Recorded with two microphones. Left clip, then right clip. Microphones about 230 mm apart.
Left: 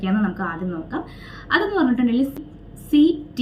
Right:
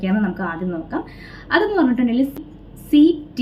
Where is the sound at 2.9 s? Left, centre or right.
Centre.